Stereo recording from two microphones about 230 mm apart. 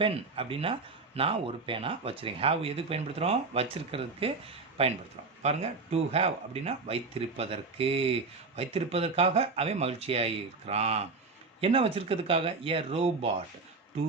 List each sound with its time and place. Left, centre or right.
0.0 s speech: right